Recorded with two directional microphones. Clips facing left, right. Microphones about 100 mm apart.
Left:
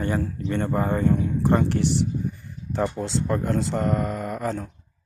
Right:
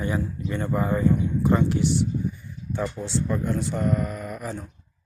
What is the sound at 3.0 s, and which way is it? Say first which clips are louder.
Speech: left 1 dB; 90° left.